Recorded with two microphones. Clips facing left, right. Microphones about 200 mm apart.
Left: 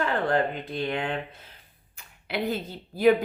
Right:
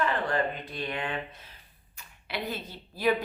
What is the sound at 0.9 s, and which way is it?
Speech, 60° left (ahead or behind).